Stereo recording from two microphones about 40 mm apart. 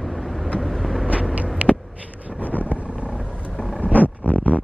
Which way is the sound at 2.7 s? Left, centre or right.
Right.